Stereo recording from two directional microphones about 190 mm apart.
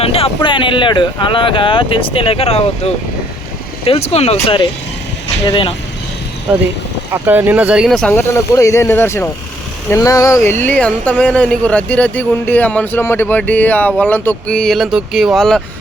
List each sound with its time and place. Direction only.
0.0 s speech: 30° left (ahead or behind)
7.1 s speech: 10° right (ahead or behind)